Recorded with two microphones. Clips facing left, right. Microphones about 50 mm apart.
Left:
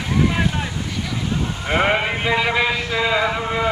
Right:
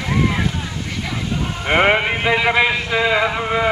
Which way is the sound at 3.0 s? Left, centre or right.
Centre.